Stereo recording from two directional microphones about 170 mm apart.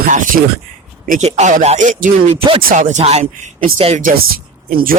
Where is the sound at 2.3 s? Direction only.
35° right (ahead or behind).